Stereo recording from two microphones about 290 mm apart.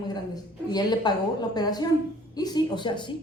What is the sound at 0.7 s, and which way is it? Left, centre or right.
Speech, centre.